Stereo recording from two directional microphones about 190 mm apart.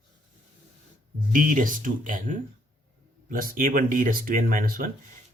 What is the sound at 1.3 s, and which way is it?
Speech, 45° right (ahead or behind).